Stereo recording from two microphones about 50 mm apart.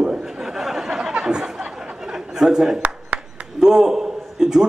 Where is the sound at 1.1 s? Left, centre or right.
Centre.